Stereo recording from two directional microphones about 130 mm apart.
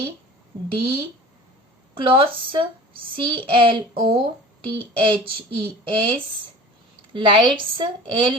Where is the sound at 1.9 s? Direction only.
40° right (ahead or behind).